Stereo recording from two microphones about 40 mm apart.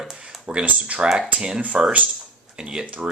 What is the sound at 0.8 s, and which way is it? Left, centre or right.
Speech, right.